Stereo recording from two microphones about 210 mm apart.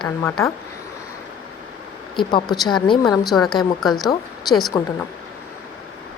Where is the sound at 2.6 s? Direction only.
20° left (ahead or behind).